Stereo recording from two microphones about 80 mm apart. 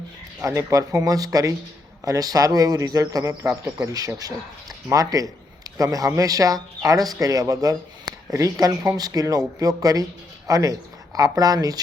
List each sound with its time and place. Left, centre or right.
0.4 s speech: right